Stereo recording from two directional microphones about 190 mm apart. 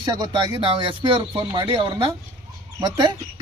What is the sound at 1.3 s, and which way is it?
Speech, 15° right (ahead or behind).